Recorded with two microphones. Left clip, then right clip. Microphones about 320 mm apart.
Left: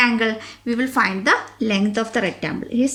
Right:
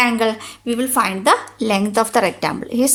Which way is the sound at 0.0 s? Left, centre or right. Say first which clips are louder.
Right 2 dB; centre.